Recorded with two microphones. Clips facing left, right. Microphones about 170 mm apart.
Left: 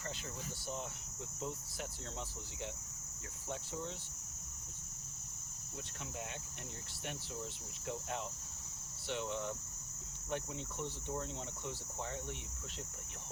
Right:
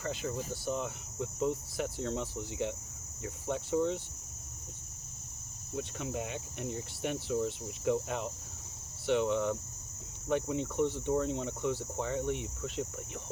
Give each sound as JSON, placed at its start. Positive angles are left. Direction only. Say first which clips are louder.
{"t": 0.0, "sound": "speech", "louder": "right 10 dB", "side_deg": -60}
{"t": 0.5, "sound": "cricket", "louder": "right 9 dB", "side_deg": -55}
{"t": 3.4, "sound": "speech", "louder": "right 13 dB", "side_deg": -65}
{"t": 5.7, "sound": "cricket", "louder": "right 11 dB", "side_deg": -70}